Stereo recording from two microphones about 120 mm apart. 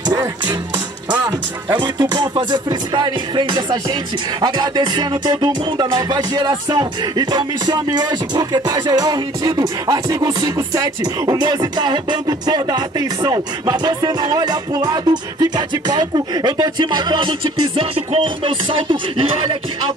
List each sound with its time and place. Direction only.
0.1 s music: 35° right (ahead or behind)
1.7 s music: 35° right (ahead or behind)